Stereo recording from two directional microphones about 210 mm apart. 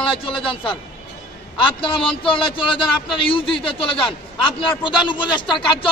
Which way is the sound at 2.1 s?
25° left (ahead or behind).